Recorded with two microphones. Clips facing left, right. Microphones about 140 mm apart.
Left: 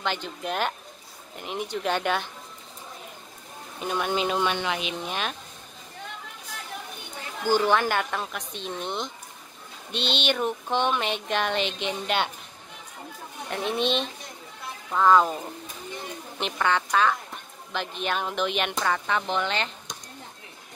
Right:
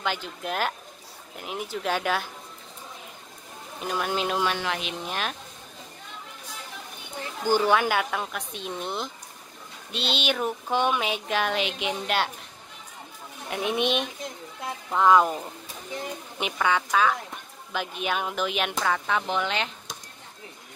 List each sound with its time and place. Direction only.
0.0 s speech: 5° right (ahead or behind)
3.8 s speech: centre (ahead or behind)
7.4 s speech: 10° right (ahead or behind)
13.5 s speech: 10° right (ahead or behind)